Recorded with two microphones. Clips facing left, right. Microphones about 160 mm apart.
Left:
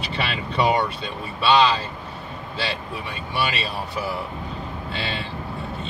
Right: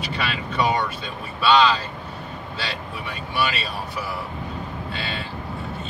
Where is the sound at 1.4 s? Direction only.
25° left (ahead or behind).